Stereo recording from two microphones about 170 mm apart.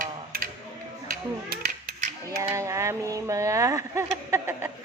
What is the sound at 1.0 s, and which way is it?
Speech, 65° right (ahead or behind).